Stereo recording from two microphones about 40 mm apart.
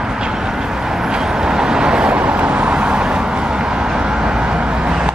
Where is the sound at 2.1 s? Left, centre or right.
Right.